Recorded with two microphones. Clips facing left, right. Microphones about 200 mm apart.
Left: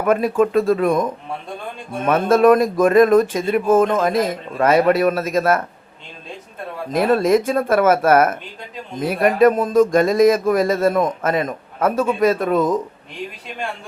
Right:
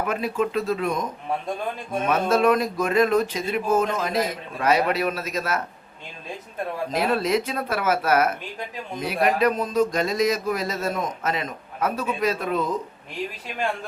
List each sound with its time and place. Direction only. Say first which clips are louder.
0.0 s speech: left 8 dB; 50° left (ahead or behind)
2.0 s speech: left 7 dB; 50° left (ahead or behind)
6.9 s speech: left 8 dB; 50° left (ahead or behind)